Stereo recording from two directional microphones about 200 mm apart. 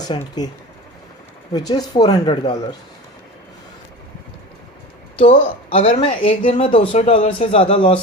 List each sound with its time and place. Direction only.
0.0 s speech: 20° left (ahead or behind)
1.5 s speech: 20° left (ahead or behind)
5.2 s speech: 30° left (ahead or behind)